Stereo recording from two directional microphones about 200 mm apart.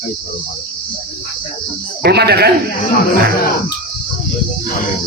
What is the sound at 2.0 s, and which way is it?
Speech, 55° right (ahead or behind).